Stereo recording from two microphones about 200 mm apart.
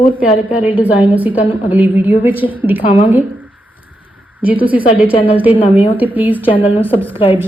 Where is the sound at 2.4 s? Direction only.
30° left (ahead or behind).